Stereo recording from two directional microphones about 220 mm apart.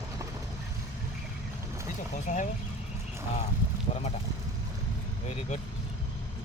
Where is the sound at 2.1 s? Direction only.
35° left (ahead or behind).